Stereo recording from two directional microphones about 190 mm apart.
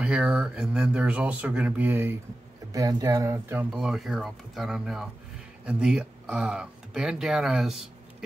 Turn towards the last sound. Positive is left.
turn(degrees=0)  # may be behind; listen again after turning